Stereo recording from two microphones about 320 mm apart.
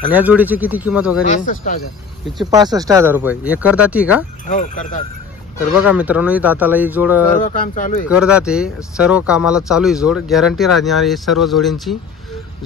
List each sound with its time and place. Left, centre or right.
0.1 s speech: centre
1.2 s speech: left
2.5 s speech: centre
5.8 s speech: centre
7.2 s speech: left
8.1 s speech: centre